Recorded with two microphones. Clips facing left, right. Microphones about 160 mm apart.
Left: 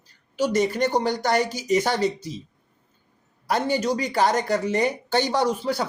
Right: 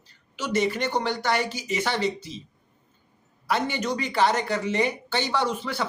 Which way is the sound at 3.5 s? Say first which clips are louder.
Left 3 dB; 40° left (ahead or behind).